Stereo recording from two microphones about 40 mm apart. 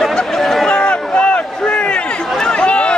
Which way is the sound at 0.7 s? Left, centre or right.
Left.